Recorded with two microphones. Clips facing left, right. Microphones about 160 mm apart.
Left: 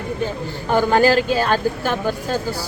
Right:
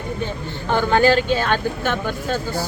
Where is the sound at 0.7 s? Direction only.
10° left (ahead or behind).